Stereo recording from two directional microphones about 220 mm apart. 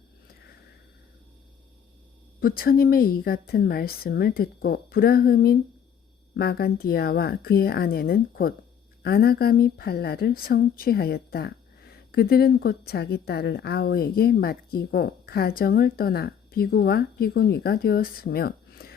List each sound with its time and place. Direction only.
2.4 s a woman's voice: 40° left (ahead or behind)